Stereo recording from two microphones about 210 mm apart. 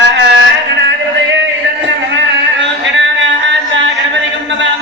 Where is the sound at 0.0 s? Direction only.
55° right (ahead or behind).